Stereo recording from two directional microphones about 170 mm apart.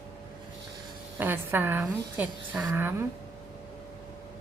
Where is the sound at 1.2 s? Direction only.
10° right (ahead or behind).